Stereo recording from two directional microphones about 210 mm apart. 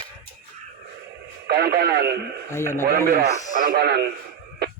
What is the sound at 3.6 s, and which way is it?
Speech, 50° right (ahead or behind).